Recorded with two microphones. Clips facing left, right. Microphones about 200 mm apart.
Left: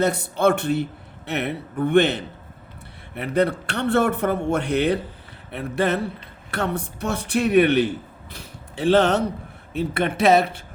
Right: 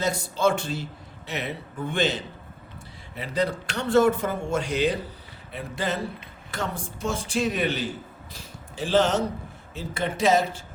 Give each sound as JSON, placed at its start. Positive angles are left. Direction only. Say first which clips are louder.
{"t": 0.0, "sound": "a man's voice", "louder": "left 4 dB", "side_deg": 60}